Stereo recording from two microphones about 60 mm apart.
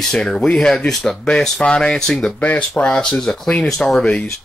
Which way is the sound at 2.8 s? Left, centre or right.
Centre.